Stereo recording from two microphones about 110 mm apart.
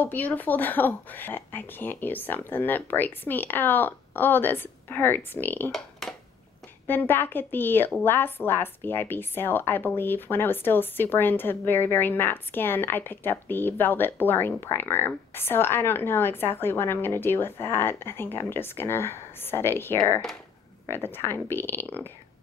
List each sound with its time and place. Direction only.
0.0 s speech: 15° left (ahead or behind)
5.7 s a sound: centre (ahead or behind)
6.9 s a woman's voice: 20° left (ahead or behind)